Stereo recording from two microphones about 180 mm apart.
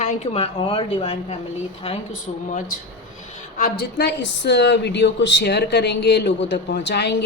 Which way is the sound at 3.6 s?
65° left (ahead or behind).